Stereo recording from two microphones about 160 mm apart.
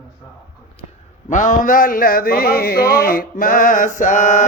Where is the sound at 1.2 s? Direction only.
55° left (ahead or behind).